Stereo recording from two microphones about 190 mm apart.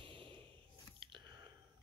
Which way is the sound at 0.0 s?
25° right (ahead or behind).